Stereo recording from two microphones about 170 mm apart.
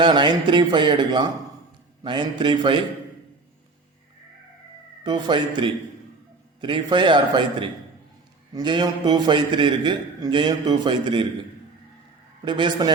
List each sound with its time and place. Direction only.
0.0 s a man's voice: 25° right (ahead or behind)
5.0 s a man's voice: 25° right (ahead or behind)
12.5 s a man's voice: 25° right (ahead or behind)